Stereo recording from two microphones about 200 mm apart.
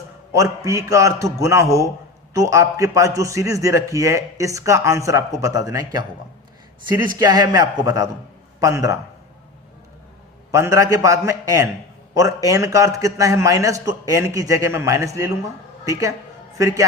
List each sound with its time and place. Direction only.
0.3 s a man's voice: 15° right (ahead or behind)
7.2 s a man's voice: 20° right (ahead or behind)
10.5 s a man's voice: 15° right (ahead or behind)